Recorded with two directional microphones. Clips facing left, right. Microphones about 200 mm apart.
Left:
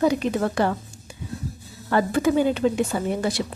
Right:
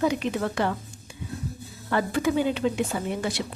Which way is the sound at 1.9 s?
45° left (ahead or behind).